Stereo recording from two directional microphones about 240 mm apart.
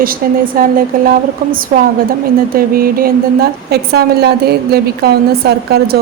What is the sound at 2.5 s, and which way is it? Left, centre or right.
A woman's voice, right.